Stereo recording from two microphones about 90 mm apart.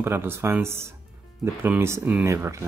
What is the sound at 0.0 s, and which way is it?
Speech, 25° right (ahead or behind).